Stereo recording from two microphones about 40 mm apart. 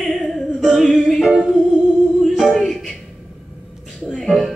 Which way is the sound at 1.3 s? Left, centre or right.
Right.